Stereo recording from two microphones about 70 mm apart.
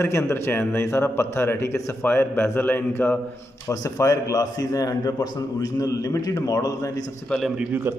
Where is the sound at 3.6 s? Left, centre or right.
Left.